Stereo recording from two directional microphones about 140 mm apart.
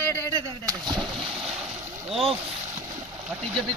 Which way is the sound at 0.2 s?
25° right (ahead or behind).